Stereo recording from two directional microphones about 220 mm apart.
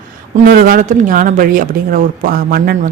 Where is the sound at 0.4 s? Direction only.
40° right (ahead or behind).